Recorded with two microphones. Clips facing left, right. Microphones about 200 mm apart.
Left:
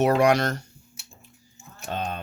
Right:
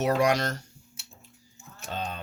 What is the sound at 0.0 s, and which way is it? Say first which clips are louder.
Speech: left 4 dB; 60° left (ahead or behind).